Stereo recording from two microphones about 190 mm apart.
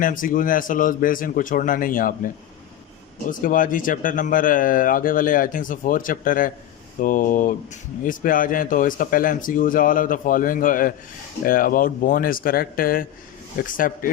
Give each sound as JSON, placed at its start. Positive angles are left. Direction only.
{"t": 0.0, "sound": "speech", "side_deg": 45}
{"t": 3.2, "sound": "speech", "side_deg": 45}